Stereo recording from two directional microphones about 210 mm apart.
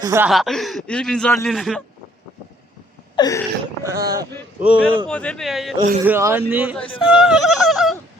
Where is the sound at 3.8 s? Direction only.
15° right (ahead or behind).